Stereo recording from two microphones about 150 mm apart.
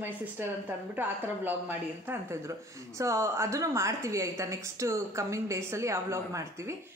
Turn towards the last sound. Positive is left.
turn(degrees=-20)  # may be behind; listen again after turning